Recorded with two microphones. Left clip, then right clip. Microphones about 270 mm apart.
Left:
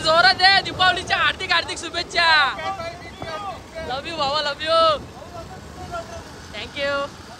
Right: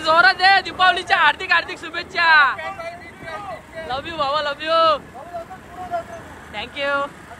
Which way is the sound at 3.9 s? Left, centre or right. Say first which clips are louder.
Right 1 dB; centre.